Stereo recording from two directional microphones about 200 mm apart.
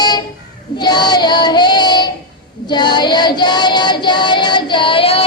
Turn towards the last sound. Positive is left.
turn(degrees=30)  # may be behind; listen again after turning